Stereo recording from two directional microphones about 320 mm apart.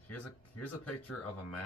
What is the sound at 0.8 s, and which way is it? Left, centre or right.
Speech, left.